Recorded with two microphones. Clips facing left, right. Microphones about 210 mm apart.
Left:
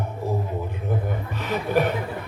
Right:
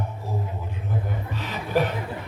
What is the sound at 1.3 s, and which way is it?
Speech, 55° left (ahead or behind).